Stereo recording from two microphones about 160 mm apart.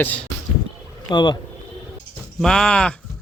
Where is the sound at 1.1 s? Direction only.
25° left (ahead or behind).